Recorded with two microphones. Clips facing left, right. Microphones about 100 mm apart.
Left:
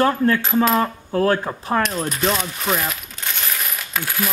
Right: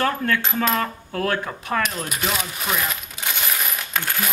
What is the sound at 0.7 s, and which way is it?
Coin, 25° left (ahead or behind).